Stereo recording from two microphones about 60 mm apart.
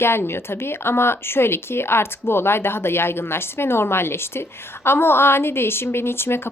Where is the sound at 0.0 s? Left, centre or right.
Left.